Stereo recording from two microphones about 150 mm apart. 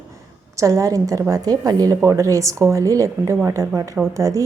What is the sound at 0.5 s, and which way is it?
A woman's voice, 20° right (ahead or behind).